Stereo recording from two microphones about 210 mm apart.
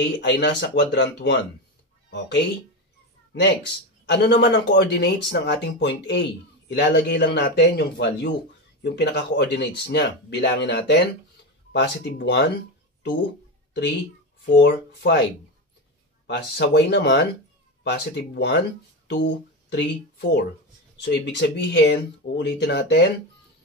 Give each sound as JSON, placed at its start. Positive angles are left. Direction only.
{"t": 0.2, "sound": "speech", "side_deg": 55}
{"t": 4.0, "sound": "speech", "side_deg": 55}
{"t": 14.4, "sound": "speech", "side_deg": 55}
{"t": 16.3, "sound": "speech", "side_deg": 55}